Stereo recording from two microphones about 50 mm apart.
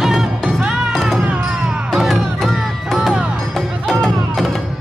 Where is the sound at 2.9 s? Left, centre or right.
Centre.